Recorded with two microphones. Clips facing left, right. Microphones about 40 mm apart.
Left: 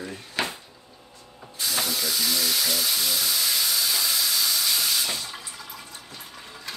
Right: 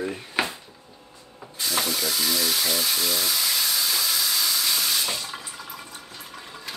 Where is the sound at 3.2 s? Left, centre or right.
Centre.